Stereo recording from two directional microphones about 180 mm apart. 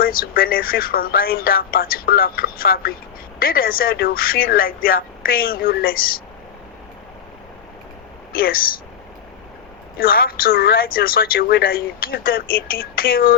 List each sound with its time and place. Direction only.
0.0 s a woman's voice: 55° left (ahead or behind)
8.4 s a woman's voice: 55° left (ahead or behind)
10.0 s a woman's voice: 55° left (ahead or behind)